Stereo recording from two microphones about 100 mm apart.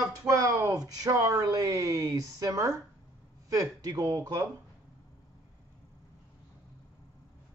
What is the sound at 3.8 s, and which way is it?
Speech, 40° right (ahead or behind).